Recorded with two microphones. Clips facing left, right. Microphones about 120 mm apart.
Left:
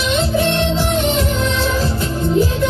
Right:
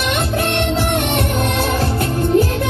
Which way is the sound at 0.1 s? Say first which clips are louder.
Left 4 dB; 60° right (ahead or behind).